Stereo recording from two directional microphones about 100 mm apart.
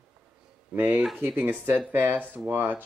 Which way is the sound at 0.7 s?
20° right (ahead or behind).